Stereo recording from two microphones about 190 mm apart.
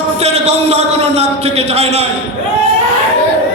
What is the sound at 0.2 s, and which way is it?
A man's voice, 35° right (ahead or behind).